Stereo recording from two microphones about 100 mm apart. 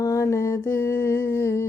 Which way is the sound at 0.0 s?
30° left (ahead or behind).